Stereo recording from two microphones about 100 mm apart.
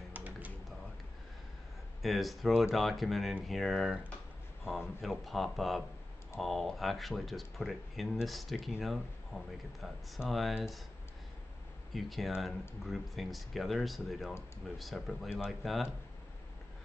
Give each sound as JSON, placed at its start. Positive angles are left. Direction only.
{"t": 0.1, "sound": "computer keyboard", "side_deg": -15}
{"t": 2.0, "sound": "speech", "side_deg": 0}
{"t": 9.3, "sound": "speech", "side_deg": 10}
{"t": 9.8, "sound": "speech", "side_deg": 0}
{"t": 11.9, "sound": "speech", "side_deg": 0}